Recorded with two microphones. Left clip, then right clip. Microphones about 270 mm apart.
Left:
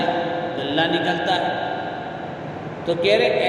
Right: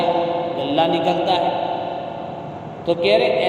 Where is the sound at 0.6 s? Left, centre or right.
Right.